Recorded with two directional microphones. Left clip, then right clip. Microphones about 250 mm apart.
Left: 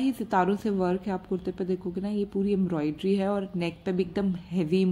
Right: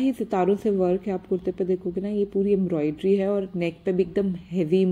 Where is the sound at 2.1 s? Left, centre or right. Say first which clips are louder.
Right 6 dB; centre.